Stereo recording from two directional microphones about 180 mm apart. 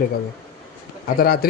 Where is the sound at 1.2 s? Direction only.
55° left (ahead or behind).